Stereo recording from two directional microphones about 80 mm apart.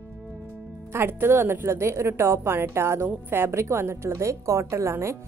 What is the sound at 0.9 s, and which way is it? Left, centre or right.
A woman's voice, right.